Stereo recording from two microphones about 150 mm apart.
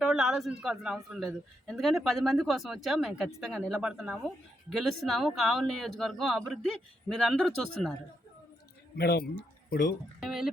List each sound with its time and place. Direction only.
0.0 s a man's voice: centre (ahead or behind)
9.0 s speech: 90° left
10.2 s a man's voice: centre (ahead or behind)